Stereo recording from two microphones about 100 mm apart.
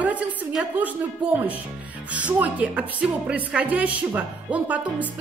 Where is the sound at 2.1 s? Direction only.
15° right (ahead or behind).